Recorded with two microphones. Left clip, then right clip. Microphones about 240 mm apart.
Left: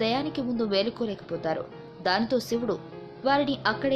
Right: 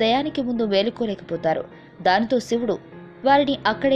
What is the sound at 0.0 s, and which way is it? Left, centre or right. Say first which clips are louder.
Speech: right 7 dB; right.